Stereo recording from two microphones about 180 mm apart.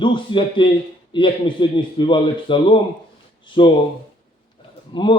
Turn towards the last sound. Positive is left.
turn(degrees=25)  # may be behind; listen again after turning